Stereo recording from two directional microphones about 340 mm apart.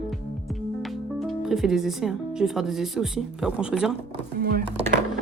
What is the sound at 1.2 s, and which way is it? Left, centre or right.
Speech, centre.